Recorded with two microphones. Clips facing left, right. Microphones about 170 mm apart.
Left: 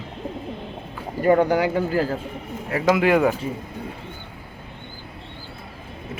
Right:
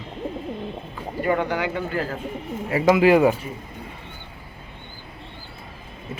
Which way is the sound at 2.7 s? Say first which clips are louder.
Right 2 dB; centre (ahead or behind).